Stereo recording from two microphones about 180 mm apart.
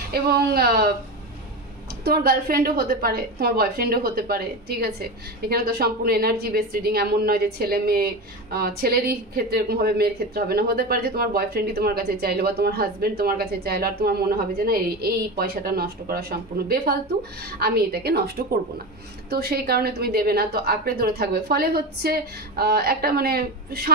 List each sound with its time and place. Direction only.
0.1 s a woman's voice: 60° right (ahead or behind)
2.0 s a woman's voice: 55° right (ahead or behind)
19.3 s a woman's voice: 60° right (ahead or behind)